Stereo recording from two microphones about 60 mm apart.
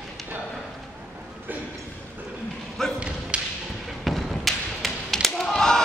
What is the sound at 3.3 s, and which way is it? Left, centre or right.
Thump, centre.